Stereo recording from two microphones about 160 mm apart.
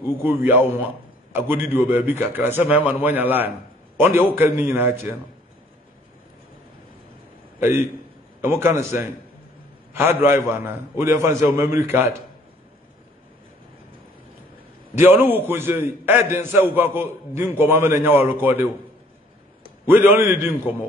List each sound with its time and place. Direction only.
0.0 s a man's voice: 15° right (ahead or behind)
8.4 s a man's voice: 15° right (ahead or behind)
15.0 s a man's voice: 15° right (ahead or behind)
19.9 s a man's voice: 15° right (ahead or behind)